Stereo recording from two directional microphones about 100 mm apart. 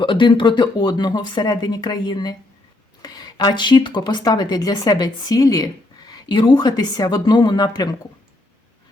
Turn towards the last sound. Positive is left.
turn(degrees=45)  # may be behind; listen again after turning